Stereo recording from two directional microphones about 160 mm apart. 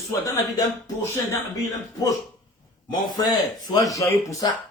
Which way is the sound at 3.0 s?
25° left (ahead or behind).